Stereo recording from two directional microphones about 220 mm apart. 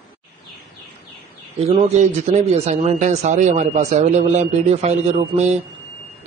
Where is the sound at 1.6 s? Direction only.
30° right (ahead or behind).